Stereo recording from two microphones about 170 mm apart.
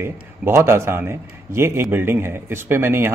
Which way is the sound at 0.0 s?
15° right (ahead or behind).